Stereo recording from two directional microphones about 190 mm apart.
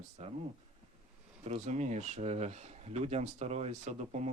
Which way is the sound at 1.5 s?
35° right (ahead or behind).